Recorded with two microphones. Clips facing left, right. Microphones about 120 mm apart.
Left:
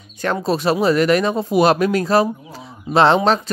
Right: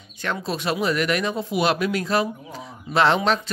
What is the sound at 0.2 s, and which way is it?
Speech, 40° left (ahead or behind).